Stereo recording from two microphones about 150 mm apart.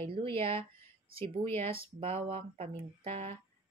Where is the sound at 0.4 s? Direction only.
40° right (ahead or behind).